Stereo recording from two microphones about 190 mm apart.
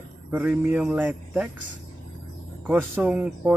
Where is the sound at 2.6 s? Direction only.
10° right (ahead or behind).